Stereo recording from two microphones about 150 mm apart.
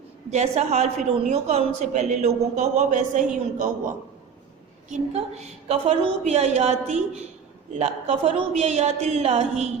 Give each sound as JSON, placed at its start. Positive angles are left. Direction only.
{"t": 0.3, "sound": "speech", "side_deg": -45}